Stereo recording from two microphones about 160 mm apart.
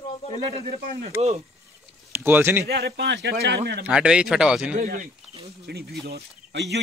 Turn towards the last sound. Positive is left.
turn(degrees=-90)